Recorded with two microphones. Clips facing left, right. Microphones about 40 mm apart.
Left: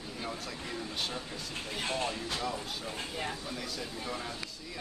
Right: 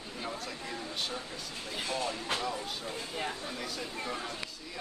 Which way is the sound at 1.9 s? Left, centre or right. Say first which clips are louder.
Even; left.